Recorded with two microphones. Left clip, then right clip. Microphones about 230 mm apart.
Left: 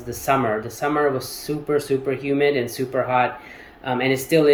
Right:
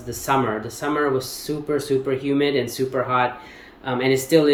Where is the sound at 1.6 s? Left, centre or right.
Centre.